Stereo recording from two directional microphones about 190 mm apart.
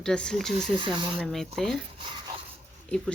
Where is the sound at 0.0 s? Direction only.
5° left (ahead or behind).